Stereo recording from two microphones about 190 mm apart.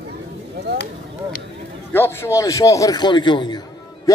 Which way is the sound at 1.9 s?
10° left (ahead or behind).